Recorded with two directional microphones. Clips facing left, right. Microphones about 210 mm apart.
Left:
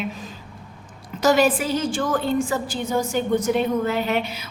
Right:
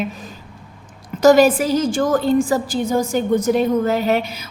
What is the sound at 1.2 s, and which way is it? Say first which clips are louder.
A woman's voice: right 6 dB; 40° right (ahead or behind).